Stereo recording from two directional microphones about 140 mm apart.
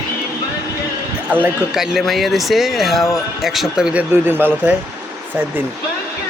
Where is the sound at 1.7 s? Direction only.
Centre (ahead or behind).